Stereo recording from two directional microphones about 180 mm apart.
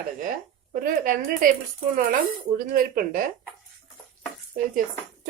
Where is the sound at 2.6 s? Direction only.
50° right (ahead or behind).